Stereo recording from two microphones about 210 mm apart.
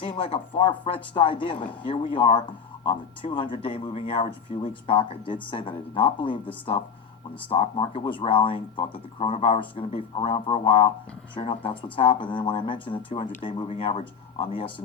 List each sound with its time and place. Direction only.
0.0 s speech: 25° left (ahead or behind)
7.5 s speech: 25° left (ahead or behind)